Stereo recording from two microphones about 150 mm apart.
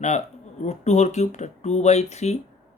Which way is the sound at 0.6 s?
50° left (ahead or behind).